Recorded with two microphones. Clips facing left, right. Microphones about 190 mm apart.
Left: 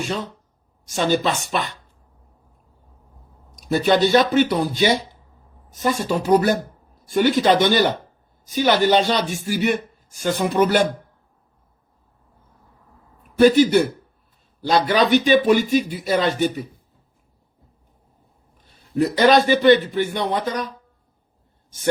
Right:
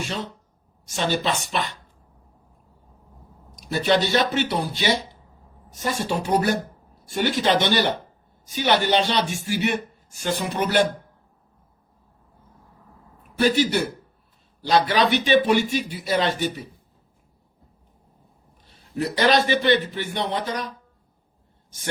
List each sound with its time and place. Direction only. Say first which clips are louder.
0.0 s speech: left 4 dB; 50° left (ahead or behind)
3.5 s speech: left 3 dB; 50° left (ahead or behind)
13.4 s speech: left 7 dB; 50° left (ahead or behind)
18.5 s a man's voice: left 7 dB; 45° left (ahead or behind)